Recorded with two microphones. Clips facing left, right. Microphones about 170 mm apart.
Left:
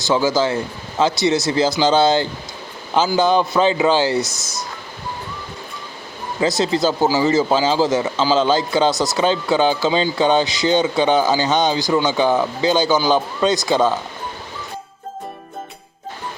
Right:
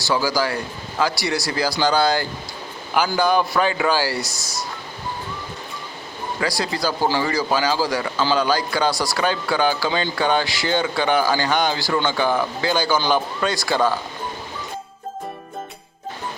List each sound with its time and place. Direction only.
0.0 s speech: 20° left (ahead or behind)
6.4 s speech: 20° left (ahead or behind)